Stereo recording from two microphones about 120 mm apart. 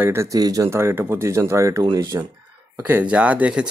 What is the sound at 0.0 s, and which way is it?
Speech, 20° right (ahead or behind).